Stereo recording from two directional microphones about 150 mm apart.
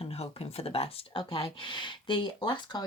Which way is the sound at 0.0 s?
40° left (ahead or behind).